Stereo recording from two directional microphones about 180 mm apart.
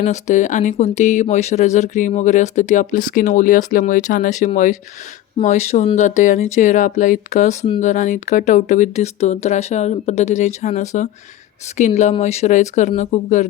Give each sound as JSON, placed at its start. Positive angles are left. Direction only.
{"t": 0.0, "sound": "speech", "side_deg": 40}